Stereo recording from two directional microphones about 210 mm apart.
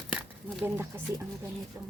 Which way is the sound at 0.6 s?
10° right (ahead or behind).